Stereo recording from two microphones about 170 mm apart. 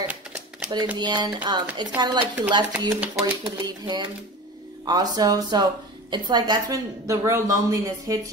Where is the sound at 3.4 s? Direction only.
25° right (ahead or behind).